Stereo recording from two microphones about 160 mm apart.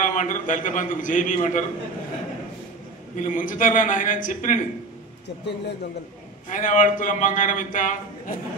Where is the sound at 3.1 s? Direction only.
55° left (ahead or behind).